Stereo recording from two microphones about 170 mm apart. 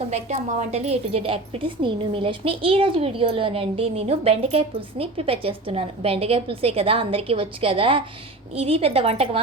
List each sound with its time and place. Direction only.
0.4 s speech: 40° right (ahead or behind)